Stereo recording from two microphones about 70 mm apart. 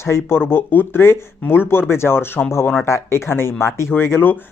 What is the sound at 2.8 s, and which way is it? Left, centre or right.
Speech, left.